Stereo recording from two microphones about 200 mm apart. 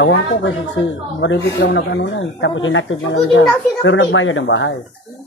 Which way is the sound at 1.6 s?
60° left (ahead or behind).